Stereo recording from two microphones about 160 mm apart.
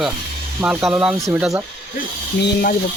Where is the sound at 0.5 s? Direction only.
5° right (ahead or behind).